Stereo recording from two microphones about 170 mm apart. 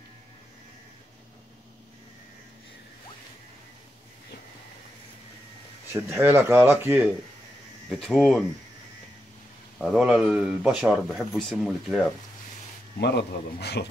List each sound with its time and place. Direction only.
5.9 s speech: 15° right (ahead or behind)
8.0 s speech: centre (ahead or behind)
9.8 s speech: centre (ahead or behind)
13.0 s a man's voice: 75° left (ahead or behind)